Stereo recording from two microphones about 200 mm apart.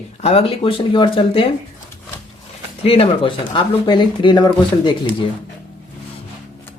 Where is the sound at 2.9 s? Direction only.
25° left (ahead or behind).